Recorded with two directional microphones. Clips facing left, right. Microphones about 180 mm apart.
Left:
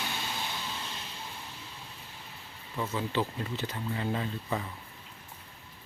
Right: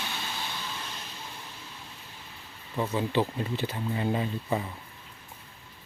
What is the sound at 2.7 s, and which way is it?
Speech, 20° right (ahead or behind).